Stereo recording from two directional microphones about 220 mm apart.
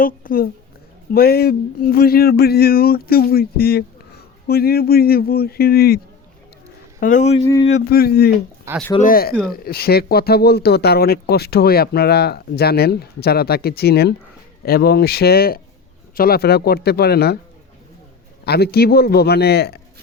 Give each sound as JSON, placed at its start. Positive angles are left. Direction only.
{"t": 0.0, "sound": "speech", "side_deg": 40}
{"t": 7.0, "sound": "speech", "side_deg": 35}
{"t": 7.4, "sound": "speech", "side_deg": 15}
{"t": 7.9, "sound": "speech", "side_deg": 45}
{"t": 18.4, "sound": "speech", "side_deg": 45}